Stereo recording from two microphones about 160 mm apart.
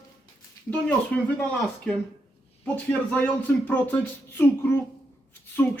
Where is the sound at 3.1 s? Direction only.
10° left (ahead or behind).